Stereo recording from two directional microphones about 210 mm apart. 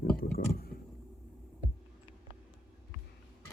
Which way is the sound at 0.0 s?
45° left (ahead or behind).